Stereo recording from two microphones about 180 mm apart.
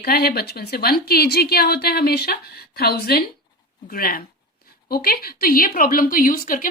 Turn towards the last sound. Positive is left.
turn(degrees=50)  # may be behind; listen again after turning